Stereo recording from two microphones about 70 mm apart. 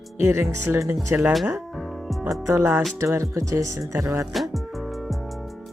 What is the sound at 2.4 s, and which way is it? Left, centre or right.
Speech, right.